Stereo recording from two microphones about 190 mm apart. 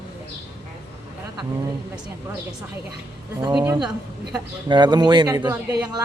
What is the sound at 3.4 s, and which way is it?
Speech, 20° right (ahead or behind).